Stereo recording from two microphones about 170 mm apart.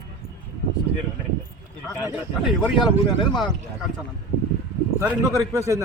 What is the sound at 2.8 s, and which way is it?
Speech, 25° left (ahead or behind).